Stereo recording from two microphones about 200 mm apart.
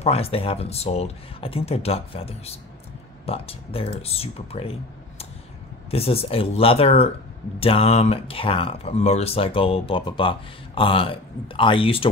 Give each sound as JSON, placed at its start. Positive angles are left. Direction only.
{"t": 0.0, "sound": "speech", "side_deg": 30}
{"t": 5.9, "sound": "speech", "side_deg": 30}